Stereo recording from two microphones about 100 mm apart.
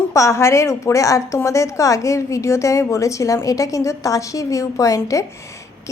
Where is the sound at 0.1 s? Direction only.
30° left (ahead or behind).